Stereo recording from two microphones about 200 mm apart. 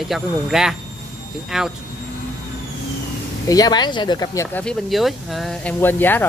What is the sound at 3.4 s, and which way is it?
Speech, 20° left (ahead or behind).